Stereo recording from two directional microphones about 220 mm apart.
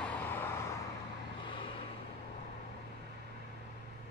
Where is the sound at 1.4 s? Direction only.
25° left (ahead or behind).